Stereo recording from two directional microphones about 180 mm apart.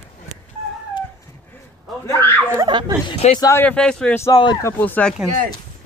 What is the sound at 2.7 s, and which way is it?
Speech, 25° right (ahead or behind).